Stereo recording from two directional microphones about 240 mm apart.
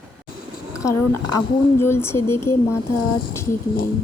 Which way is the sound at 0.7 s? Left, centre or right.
Centre.